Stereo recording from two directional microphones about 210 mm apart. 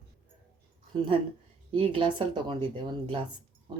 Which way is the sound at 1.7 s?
25° right (ahead or behind).